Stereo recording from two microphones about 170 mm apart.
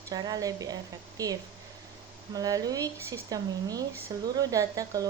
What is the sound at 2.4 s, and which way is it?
Speech, 20° right (ahead or behind).